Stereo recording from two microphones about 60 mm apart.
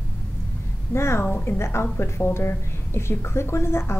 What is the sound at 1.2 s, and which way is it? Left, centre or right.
A woman's voice, left.